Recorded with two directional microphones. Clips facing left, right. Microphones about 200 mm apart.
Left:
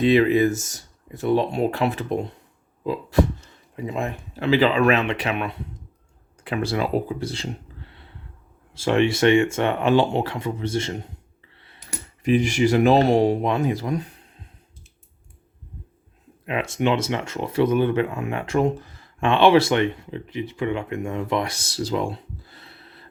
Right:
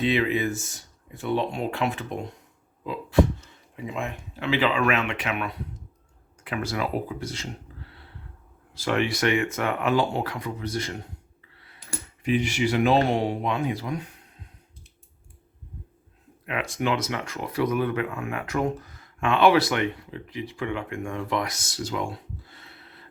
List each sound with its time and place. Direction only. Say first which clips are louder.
0.0 s speech: left 7 dB; 40° left (ahead or behind)
8.7 s speech: left 6 dB; 25° left (ahead or behind)
11.9 s speech: left 5 dB; 40° left (ahead or behind)
16.5 s speech: left 4 dB; 25° left (ahead or behind)